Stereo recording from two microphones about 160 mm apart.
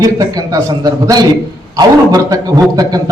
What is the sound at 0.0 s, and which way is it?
A man's voice, 20° right (ahead or behind).